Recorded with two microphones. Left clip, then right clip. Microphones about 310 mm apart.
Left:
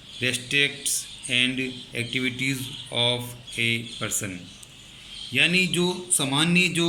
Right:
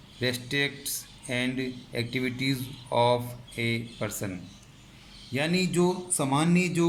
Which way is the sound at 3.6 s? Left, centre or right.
Right.